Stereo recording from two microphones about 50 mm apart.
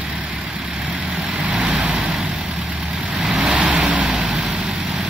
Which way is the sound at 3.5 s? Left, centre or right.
Right.